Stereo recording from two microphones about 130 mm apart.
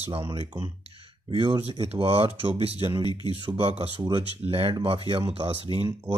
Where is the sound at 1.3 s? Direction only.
45° right (ahead or behind).